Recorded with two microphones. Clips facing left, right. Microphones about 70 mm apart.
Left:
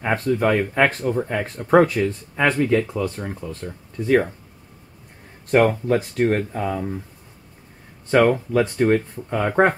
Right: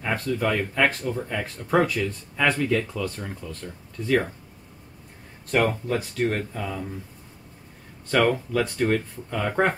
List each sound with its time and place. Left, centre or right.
0.0 s speech: left
5.5 s speech: left
8.1 s speech: left